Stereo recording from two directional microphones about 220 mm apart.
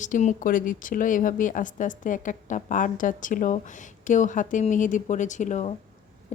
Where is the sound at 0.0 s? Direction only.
35° left (ahead or behind).